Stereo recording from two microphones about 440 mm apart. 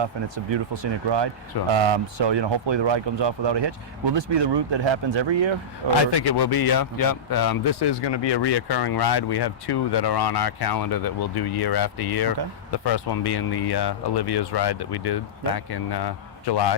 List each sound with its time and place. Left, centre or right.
0.5 s speech: right
1.7 s speech: right
6.1 s speech: left